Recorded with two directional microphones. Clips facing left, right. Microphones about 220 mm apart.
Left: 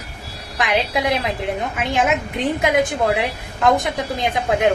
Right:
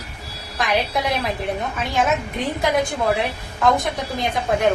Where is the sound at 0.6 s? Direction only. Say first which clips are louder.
Left 2 dB; 20° left (ahead or behind).